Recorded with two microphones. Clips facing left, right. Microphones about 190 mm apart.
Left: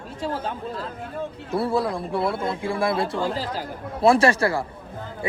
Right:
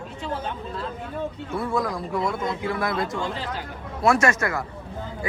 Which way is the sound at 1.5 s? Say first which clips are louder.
Left 4 dB; 35° left (ahead or behind).